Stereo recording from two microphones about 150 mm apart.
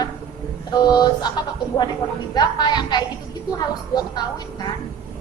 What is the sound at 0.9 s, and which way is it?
Speech, 30° left (ahead or behind).